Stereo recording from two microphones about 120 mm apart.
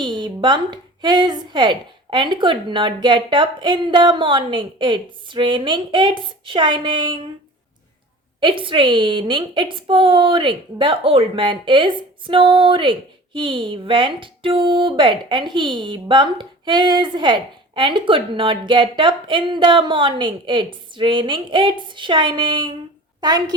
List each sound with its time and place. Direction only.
0.0 s a woman's voice: 40° right (ahead or behind)
8.4 s a woman's voice: 45° right (ahead or behind)